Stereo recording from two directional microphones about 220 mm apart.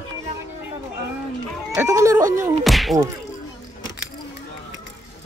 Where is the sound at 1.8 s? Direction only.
15° right (ahead or behind).